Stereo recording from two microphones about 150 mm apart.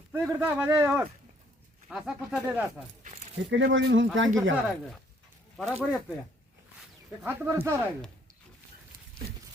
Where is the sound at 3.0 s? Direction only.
50° right (ahead or behind).